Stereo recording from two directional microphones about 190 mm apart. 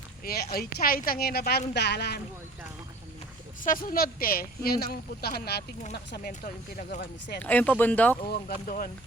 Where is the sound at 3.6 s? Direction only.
45° left (ahead or behind).